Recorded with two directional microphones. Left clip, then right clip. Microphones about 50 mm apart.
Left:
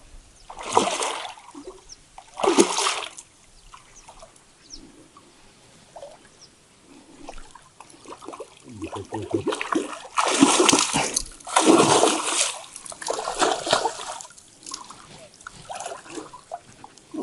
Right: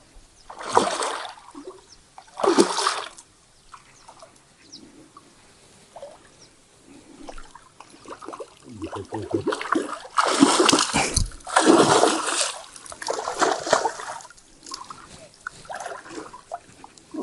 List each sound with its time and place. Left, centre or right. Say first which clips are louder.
0.5 s boat: right 1 dB; left
1.6 s a sound: right 3 dB; left
2.3 s splash: even; left
4.7 s bird: left 1 dB; left
6.0 s a sound: right 1 dB; left
8.0 s a sound: right 2 dB; left
8.8 s boat: even; left
11.1 s splash: right 1 dB; left
15.4 s dog: right 1 dB; left